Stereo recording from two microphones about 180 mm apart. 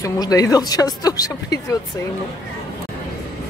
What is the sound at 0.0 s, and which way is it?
Speech, 20° left (ahead or behind).